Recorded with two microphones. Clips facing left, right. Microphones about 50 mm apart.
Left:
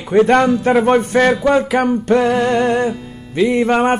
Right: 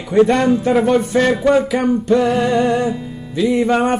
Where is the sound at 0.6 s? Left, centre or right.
Left.